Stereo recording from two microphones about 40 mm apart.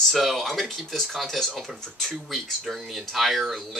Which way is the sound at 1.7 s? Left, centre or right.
Centre.